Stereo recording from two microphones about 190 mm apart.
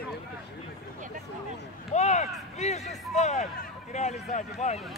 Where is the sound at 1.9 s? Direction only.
35° left (ahead or behind).